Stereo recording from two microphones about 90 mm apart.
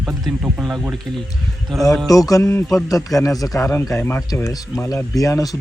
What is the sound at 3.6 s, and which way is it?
Speech, 30° left (ahead or behind).